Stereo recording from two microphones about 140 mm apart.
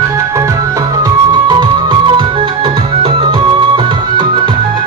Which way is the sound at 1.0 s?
30° right (ahead or behind).